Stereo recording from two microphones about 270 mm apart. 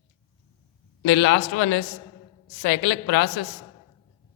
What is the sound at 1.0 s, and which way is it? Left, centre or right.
A man's voice, left.